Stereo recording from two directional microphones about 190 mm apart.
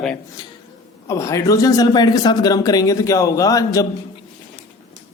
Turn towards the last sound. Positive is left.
turn(degrees=20)  # may be behind; listen again after turning